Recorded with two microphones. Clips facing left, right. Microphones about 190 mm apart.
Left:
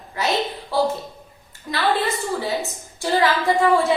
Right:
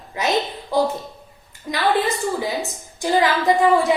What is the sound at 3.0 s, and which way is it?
Speech, 20° right (ahead or behind).